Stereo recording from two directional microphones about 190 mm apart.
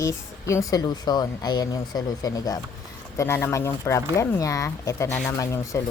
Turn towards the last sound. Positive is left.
turn(degrees=15)  # may be behind; listen again after turning